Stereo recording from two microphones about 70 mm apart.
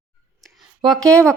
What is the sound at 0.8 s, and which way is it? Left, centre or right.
Speech, right.